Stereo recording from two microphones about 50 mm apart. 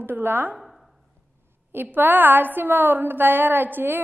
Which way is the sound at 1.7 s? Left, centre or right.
Right.